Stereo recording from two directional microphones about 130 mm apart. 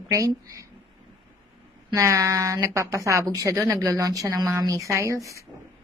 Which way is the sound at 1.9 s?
25° right (ahead or behind).